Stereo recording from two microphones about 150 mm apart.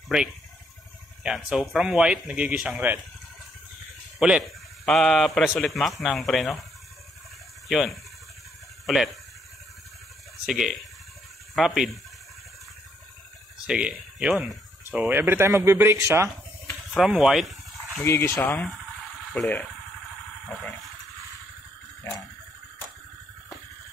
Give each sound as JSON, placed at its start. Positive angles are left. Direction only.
{"t": 1.2, "sound": "speech", "side_deg": -5}
{"t": 4.2, "sound": "speech", "side_deg": -5}
{"t": 7.6, "sound": "speech", "side_deg": 0}
{"t": 10.4, "sound": "speech", "side_deg": 0}
{"t": 13.7, "sound": "speech", "side_deg": -5}
{"t": 16.9, "sound": "speech", "side_deg": 0}
{"t": 18.0, "sound": "speech", "side_deg": 20}